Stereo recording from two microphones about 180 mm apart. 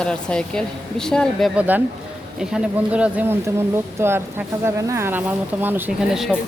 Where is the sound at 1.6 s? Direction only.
10° right (ahead or behind).